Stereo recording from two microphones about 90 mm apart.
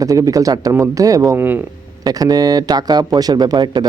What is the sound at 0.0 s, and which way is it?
Speech, 40° right (ahead or behind).